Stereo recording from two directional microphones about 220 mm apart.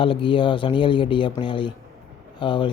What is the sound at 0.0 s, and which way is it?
Speech, 25° left (ahead or behind).